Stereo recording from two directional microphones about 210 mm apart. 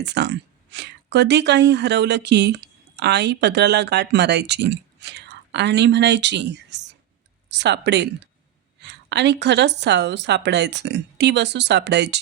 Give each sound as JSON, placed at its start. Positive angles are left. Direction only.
{"t": 0.0, "sound": "a woman's voice", "side_deg": -55}